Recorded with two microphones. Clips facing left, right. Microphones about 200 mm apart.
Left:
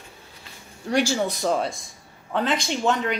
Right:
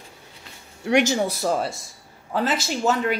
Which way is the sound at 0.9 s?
20° right (ahead or behind).